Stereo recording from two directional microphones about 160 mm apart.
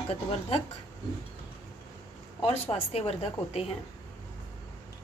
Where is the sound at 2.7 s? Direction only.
40° left (ahead or behind).